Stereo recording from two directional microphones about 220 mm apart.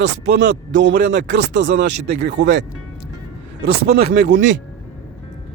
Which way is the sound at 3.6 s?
45° right (ahead or behind).